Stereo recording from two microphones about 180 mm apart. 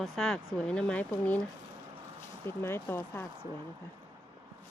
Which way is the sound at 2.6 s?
15° left (ahead or behind).